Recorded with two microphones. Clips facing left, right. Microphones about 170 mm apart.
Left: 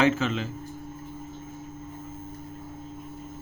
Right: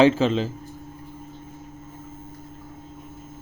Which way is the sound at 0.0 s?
30° right (ahead or behind).